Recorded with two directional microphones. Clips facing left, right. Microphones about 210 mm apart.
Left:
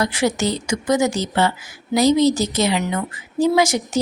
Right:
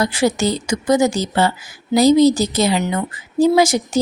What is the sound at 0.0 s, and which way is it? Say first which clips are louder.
A woman's voice: right 3 dB; 30° right (ahead or behind).